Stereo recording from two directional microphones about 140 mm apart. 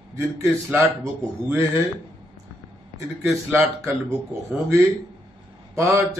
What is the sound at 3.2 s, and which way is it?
Speech, 15° right (ahead or behind).